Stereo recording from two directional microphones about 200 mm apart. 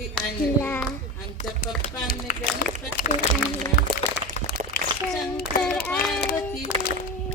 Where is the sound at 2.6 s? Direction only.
50° left (ahead or behind).